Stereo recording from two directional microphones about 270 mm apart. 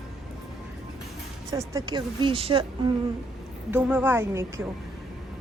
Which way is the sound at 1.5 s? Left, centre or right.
Centre.